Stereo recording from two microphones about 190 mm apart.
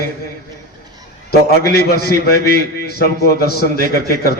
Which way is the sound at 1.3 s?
55° left (ahead or behind).